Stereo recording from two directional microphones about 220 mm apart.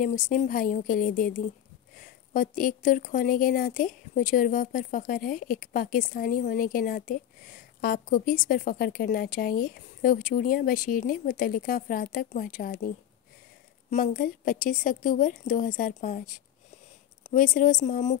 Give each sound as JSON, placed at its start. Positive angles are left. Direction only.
{"t": 0.0, "sound": "speech", "side_deg": 35}